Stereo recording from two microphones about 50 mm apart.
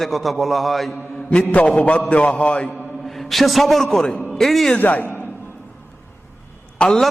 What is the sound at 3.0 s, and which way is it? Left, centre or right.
Speech, centre.